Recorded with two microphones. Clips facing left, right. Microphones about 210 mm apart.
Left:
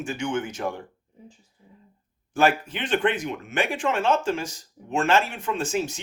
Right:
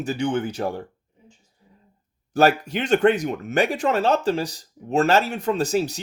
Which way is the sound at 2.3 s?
40° right (ahead or behind).